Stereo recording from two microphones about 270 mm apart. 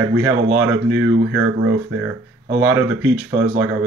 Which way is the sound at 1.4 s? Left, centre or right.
Right.